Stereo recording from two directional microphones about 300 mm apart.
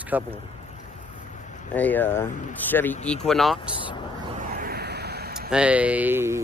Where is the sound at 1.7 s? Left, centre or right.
Centre.